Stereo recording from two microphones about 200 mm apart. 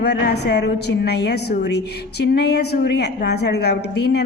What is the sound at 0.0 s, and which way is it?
A woman's voice, 55° left (ahead or behind).